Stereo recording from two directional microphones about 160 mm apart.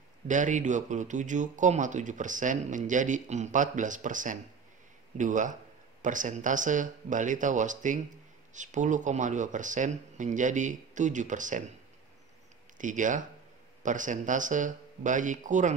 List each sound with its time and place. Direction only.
0.3 s speech: 50° right (ahead or behind)
12.7 s speech: 55° right (ahead or behind)